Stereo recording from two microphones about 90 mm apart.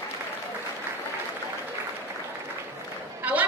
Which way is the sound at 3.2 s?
20° right (ahead or behind).